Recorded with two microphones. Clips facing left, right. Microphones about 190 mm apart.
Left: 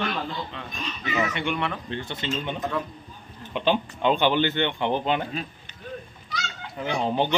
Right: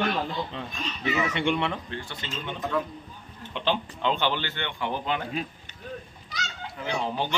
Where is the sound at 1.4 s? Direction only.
25° right (ahead or behind).